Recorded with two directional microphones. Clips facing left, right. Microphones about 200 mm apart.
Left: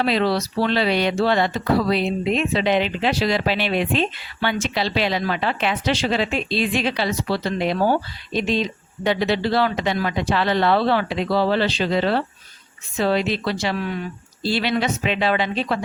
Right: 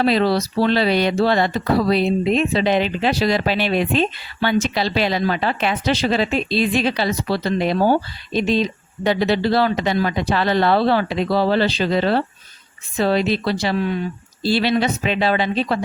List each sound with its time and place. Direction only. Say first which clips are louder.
0.0 s speech: right 3 dB; 40° right (ahead or behind)